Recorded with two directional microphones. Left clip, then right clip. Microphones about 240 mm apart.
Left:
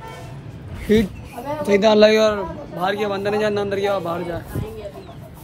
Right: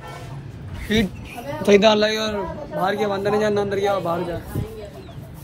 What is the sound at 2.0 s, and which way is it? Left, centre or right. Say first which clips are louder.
Speech: left 8 dB; left.